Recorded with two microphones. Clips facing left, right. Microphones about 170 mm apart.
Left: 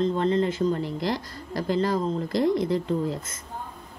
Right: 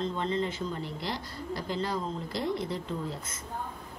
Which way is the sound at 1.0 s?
90° left.